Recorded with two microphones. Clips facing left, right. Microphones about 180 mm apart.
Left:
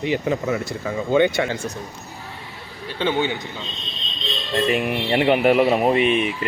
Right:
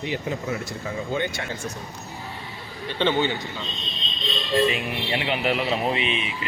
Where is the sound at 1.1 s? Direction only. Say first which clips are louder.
Left 12 dB; 90° left.